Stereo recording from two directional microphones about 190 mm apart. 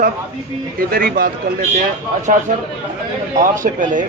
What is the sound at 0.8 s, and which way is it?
A man's voice, 50° right (ahead or behind).